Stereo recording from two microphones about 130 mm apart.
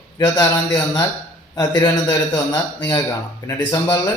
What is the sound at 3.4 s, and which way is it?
Speech, 30° left (ahead or behind).